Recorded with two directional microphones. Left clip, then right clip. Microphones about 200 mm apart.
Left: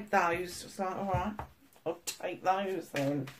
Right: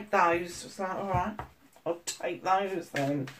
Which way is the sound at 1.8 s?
40° left (ahead or behind).